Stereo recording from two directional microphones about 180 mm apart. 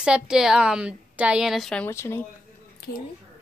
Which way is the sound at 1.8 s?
15° left (ahead or behind).